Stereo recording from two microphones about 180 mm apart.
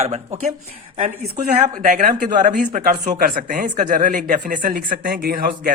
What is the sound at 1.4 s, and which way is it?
Speech, 45° right (ahead or behind).